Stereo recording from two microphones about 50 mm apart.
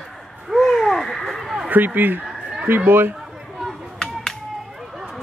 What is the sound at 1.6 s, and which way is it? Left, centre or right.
Speech, right.